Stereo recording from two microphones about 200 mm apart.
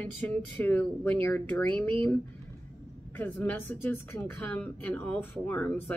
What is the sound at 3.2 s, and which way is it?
A woman's voice, 10° left (ahead or behind).